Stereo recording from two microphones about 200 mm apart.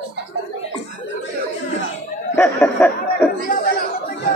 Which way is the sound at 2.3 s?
10° left (ahead or behind).